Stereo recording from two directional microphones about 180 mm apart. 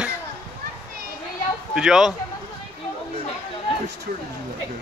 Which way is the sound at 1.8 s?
5° right (ahead or behind).